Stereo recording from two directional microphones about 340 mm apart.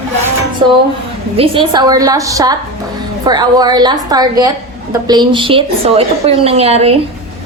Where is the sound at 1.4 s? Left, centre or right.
Centre.